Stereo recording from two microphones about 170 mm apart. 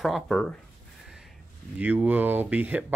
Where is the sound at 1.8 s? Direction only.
10° right (ahead or behind).